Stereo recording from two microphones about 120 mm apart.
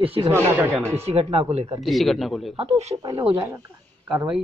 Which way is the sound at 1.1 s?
60° right (ahead or behind).